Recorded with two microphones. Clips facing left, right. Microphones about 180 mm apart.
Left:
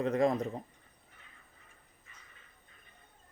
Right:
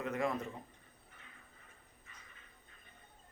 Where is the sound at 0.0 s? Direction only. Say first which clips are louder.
Left 7 dB; 35° left (ahead or behind).